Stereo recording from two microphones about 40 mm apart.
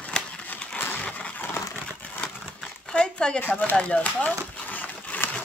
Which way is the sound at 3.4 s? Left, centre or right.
Left.